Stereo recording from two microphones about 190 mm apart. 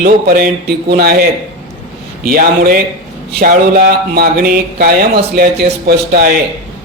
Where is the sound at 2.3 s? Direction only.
50° right (ahead or behind).